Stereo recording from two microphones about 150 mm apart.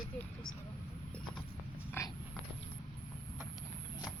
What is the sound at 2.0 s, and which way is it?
Dog, 15° left (ahead or behind).